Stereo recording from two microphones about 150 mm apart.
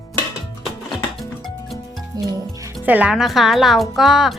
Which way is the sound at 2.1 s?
25° right (ahead or behind).